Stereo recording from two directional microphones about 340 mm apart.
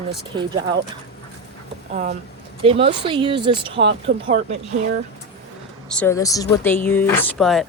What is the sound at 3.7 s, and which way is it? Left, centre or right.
Speech, right.